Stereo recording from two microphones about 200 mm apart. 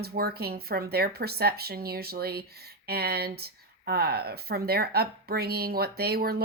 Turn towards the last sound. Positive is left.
turn(degrees=-50)  # may be behind; listen again after turning